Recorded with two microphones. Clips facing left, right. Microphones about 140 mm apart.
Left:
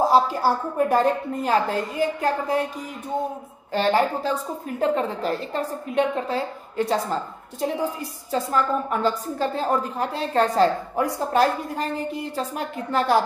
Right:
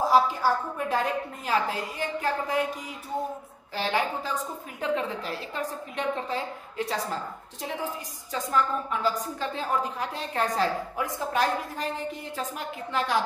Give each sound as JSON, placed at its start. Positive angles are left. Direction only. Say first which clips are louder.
{"t": 0.0, "sound": "a woman's voice", "louder": "left 3 dB", "side_deg": 40}
{"t": 3.7, "sound": "a woman's voice", "louder": "left 7 dB", "side_deg": 45}